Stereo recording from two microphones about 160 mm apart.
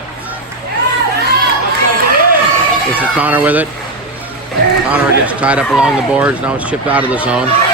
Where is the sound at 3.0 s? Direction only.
10° right (ahead or behind).